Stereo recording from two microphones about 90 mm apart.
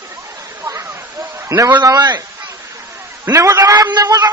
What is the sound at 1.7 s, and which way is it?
Speech, 50° right (ahead or behind).